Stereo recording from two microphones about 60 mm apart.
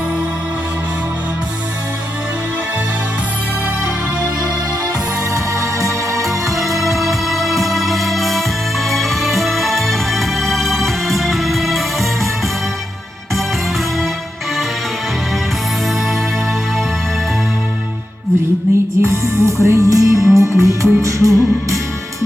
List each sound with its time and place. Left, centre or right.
5.3 s music: right
6.2 s music: centre
19.0 s music: right